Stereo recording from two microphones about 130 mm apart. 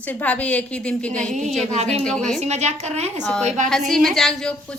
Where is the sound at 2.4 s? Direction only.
60° right (ahead or behind).